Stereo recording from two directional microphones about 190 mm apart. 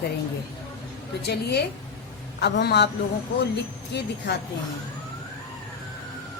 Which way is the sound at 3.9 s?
65° left (ahead or behind).